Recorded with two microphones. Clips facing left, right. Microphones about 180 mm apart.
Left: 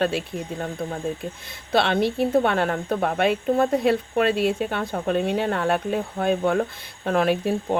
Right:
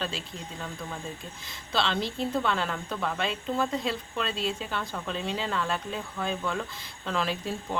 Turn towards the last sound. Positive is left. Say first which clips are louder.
# left 10 dB
turn(degrees=60)  # may be behind; listen again after turning